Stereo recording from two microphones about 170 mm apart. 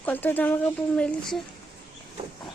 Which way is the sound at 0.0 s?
10° left (ahead or behind).